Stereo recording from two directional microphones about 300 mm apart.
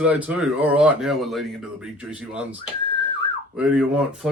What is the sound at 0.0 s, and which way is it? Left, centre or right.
Speech, centre.